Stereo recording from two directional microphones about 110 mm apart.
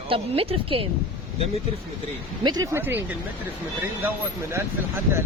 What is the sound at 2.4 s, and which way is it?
Speech, 40° right (ahead or behind).